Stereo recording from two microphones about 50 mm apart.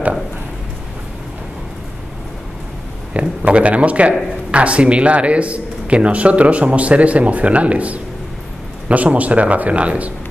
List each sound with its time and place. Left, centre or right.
3.1 s a man's voice: right